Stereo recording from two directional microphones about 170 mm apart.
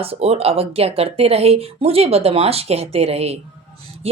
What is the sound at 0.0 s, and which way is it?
A woman's voice, 35° right (ahead or behind).